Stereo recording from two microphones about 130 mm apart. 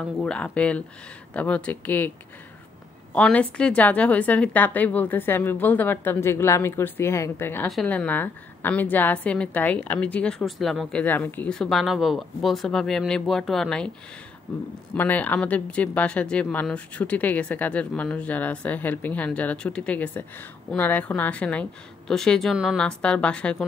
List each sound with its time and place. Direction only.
0.0 s a woman's voice: 5° left (ahead or behind)
22.8 s a woman's voice: 5° left (ahead or behind)